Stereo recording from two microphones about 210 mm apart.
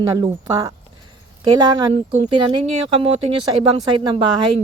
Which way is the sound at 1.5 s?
20° right (ahead or behind).